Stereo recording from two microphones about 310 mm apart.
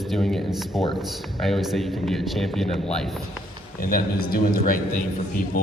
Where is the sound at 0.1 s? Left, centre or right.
Centre.